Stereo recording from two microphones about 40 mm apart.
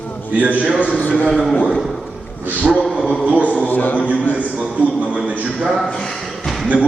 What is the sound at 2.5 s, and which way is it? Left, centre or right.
Speech, right.